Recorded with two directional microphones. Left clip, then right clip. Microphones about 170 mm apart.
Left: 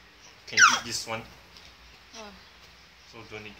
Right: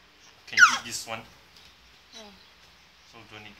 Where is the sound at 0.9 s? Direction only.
35° right (ahead or behind).